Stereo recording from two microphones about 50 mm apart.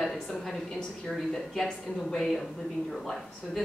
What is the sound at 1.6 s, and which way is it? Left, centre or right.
Speech, centre.